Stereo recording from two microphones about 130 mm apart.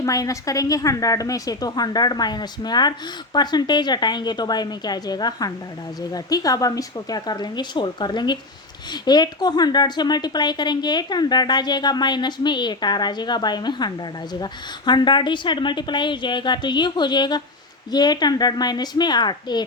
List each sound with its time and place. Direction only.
0.0 s a woman's voice: 25° left (ahead or behind)